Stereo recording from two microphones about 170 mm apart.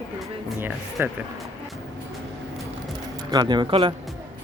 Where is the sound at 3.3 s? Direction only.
25° right (ahead or behind).